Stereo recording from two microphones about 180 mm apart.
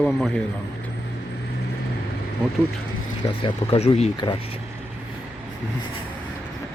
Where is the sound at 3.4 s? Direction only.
30° left (ahead or behind).